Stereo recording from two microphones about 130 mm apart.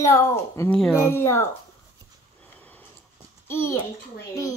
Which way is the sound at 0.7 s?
5° left (ahead or behind).